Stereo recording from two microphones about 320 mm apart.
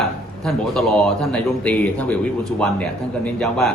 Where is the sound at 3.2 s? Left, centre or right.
Centre.